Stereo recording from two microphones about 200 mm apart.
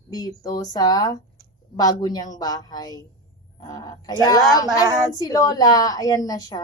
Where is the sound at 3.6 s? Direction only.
20° left (ahead or behind).